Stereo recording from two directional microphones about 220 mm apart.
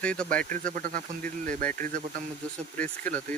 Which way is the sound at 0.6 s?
40° right (ahead or behind).